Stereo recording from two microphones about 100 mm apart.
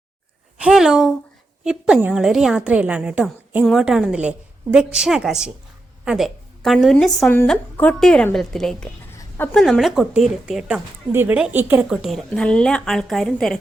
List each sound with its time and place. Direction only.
0.6 s a woman's voice: 5° right (ahead or behind)
3.6 s a woman's voice: centre (ahead or behind)
11.1 s a woman's voice: 20° right (ahead or behind)
11.9 s a woman's voice: centre (ahead or behind)